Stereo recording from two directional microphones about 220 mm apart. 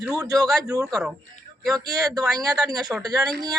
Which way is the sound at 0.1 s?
15° right (ahead or behind).